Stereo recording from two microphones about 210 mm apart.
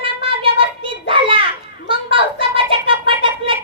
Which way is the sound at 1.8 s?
25° right (ahead or behind).